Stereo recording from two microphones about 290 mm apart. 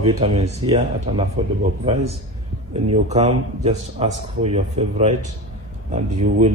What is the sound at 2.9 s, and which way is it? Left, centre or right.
Speech, right.